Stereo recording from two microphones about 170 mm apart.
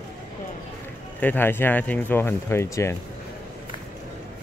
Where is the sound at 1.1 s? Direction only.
10° left (ahead or behind).